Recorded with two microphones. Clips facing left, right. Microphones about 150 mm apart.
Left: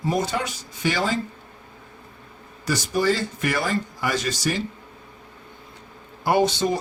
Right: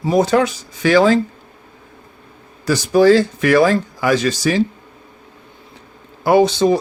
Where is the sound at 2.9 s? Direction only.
90° right.